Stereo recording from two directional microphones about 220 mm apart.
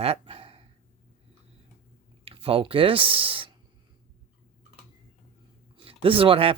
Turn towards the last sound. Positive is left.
turn(degrees=-25)  # may be behind; listen again after turning